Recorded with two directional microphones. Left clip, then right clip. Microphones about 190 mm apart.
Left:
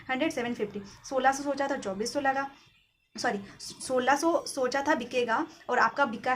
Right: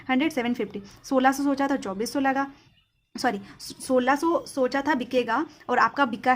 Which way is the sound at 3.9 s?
20° right (ahead or behind).